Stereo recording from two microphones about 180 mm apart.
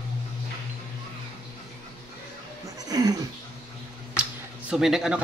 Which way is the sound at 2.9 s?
20° right (ahead or behind).